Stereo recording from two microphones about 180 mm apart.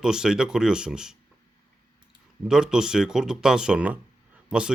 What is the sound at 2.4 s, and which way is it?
Speech, 5° right (ahead or behind).